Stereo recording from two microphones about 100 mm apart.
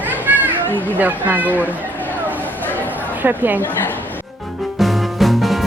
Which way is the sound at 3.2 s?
20° right (ahead or behind).